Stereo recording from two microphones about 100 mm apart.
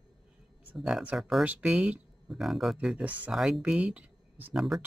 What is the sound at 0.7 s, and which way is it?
Speech, 5° right (ahead or behind).